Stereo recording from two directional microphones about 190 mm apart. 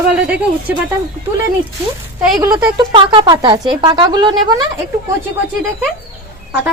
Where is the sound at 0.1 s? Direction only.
5° right (ahead or behind).